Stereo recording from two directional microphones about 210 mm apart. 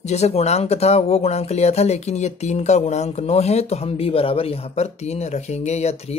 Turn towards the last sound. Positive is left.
turn(degrees=30)  # may be behind; listen again after turning